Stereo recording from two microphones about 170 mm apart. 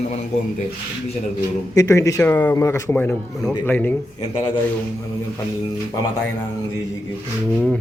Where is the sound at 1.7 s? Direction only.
20° left (ahead or behind).